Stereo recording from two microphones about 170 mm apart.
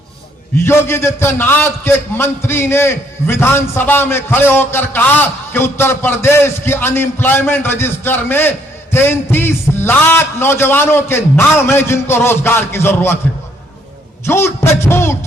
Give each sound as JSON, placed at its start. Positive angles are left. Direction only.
{"t": 0.5, "sound": "a man's voice", "side_deg": 15}
{"t": 14.3, "sound": "a man's voice", "side_deg": 15}